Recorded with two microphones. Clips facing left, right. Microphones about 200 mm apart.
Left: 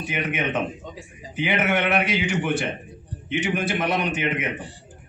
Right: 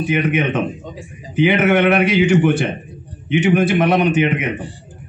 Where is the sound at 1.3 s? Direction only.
75° right (ahead or behind).